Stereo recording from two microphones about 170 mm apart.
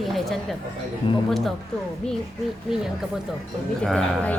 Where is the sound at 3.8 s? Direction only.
5° left (ahead or behind).